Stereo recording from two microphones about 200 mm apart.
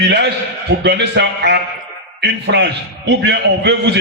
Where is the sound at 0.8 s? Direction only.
55° right (ahead or behind).